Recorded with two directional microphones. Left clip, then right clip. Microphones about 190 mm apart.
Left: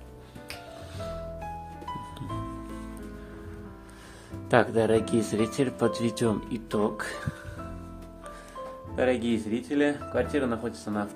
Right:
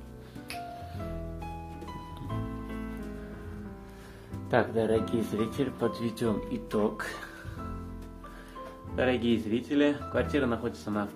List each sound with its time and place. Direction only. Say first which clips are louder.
4.5 s speech: left 4 dB; 30° left (ahead or behind)
6.5 s speech: left 1 dB; 20° left (ahead or behind)
8.9 s speech: left 2 dB; 10° left (ahead or behind)